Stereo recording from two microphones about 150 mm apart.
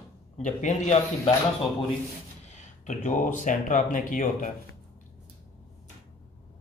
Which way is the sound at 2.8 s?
55° left (ahead or behind).